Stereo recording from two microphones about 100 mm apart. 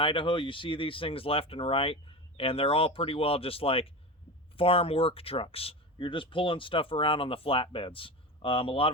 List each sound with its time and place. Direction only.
0.0 s speech: 60° left (ahead or behind)